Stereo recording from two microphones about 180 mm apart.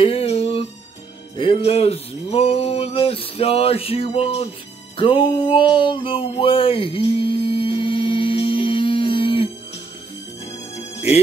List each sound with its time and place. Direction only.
0.0 s music: 30° left (ahead or behind)